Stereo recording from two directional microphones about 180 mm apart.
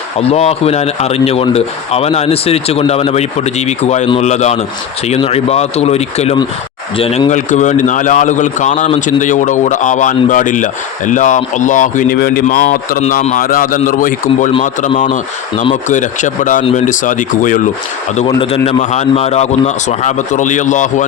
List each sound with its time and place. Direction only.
0.2 s speech: 35° left (ahead or behind)
18.2 s speech: 35° left (ahead or behind)